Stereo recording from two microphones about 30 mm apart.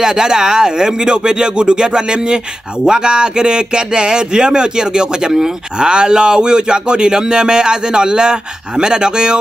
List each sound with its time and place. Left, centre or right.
0.0 s speech: right